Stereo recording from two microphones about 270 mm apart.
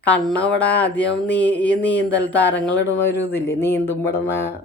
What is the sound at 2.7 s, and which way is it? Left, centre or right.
Speech, left.